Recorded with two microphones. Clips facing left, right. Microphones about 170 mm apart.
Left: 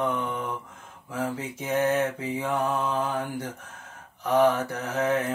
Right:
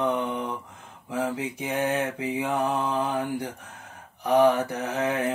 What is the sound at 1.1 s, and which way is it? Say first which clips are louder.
Mantra: right 2 dB; 15° right (ahead or behind).